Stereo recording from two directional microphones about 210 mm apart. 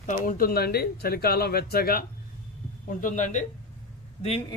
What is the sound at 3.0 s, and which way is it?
Speech, 35° left (ahead or behind).